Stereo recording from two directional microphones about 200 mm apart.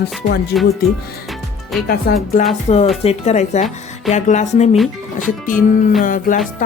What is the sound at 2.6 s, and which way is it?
Speech, 30° left (ahead or behind).